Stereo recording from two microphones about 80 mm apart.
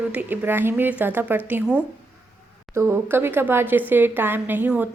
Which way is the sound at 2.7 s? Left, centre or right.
Right.